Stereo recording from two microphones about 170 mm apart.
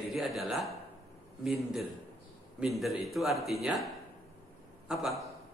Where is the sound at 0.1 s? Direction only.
Centre (ahead or behind).